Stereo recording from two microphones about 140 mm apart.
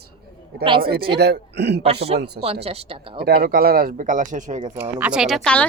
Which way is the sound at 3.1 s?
90° right.